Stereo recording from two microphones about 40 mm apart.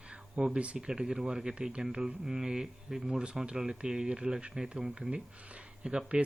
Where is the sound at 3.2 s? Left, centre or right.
Right.